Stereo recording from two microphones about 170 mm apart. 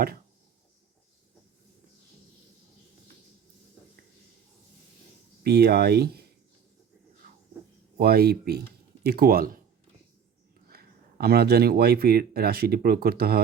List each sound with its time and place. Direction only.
5.4 s speech: 70° right (ahead or behind)
7.9 s speech: 65° right (ahead or behind)
10.7 s speech: 65° right (ahead or behind)